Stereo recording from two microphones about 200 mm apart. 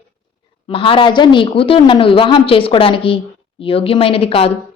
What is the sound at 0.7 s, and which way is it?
A woman's voice, 25° left (ahead or behind).